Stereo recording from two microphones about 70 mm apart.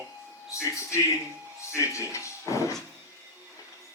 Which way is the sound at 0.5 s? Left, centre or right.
Left.